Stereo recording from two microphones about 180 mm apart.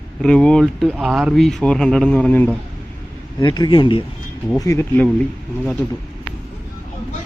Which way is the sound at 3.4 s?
25° left (ahead or behind).